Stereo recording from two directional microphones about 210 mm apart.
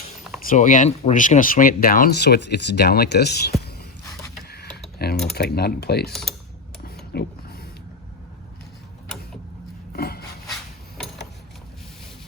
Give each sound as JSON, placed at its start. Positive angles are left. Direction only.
{"t": 0.5, "sound": "speech", "side_deg": 35}
{"t": 4.4, "sound": "a sound", "side_deg": 50}
{"t": 4.9, "sound": "typing", "side_deg": 50}
{"t": 5.3, "sound": "speech", "side_deg": 50}
{"t": 6.8, "sound": "mechanisms", "side_deg": 50}
{"t": 9.9, "sound": "rub", "side_deg": 45}